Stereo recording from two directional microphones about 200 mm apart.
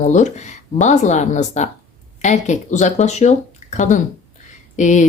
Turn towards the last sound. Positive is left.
turn(degrees=35)  # may be behind; listen again after turning